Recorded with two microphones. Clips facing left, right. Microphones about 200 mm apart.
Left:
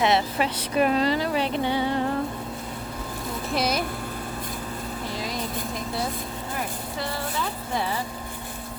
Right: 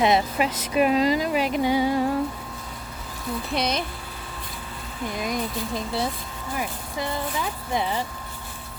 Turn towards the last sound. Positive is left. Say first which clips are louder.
# right 1 dB
turn(degrees=-15)  # may be behind; listen again after turning